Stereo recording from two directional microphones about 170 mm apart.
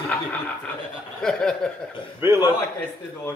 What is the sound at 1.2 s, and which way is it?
Speech, 5° left (ahead or behind).